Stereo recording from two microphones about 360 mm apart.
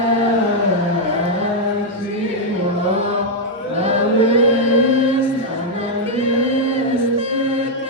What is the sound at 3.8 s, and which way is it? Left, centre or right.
Chant, centre.